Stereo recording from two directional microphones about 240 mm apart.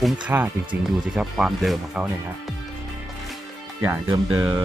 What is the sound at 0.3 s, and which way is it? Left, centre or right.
Speech, centre.